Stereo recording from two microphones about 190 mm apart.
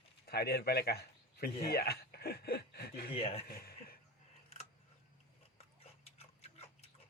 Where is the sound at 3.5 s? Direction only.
50° left (ahead or behind).